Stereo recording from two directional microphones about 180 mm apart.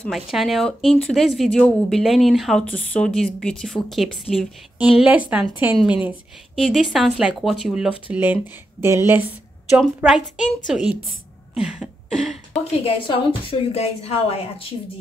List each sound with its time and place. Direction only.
0.0 s a woman's voice: centre (ahead or behind)
11.5 s a sound: 5° right (ahead or behind)
12.8 s a woman's voice: 30° left (ahead or behind)